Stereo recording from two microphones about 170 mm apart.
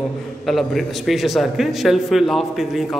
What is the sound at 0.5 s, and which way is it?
A man's voice, centre (ahead or behind).